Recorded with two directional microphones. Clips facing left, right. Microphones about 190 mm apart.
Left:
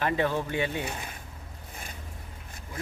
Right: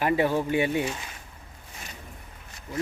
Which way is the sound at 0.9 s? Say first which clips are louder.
Right 1 dB; 55° left (ahead or behind).